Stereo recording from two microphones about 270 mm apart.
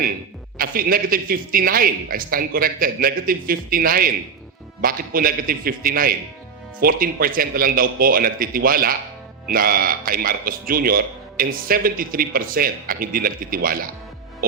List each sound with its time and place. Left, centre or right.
0.6 s speech: right